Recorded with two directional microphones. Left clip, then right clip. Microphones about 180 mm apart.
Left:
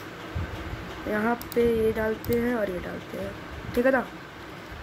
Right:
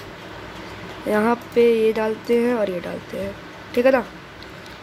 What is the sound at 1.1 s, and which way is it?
Music, 10° right (ahead or behind).